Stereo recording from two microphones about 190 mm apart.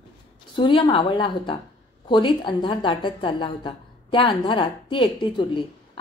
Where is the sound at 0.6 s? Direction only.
25° left (ahead or behind).